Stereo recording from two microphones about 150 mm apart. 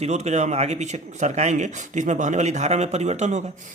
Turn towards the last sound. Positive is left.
turn(degrees=-50)  # may be behind; listen again after turning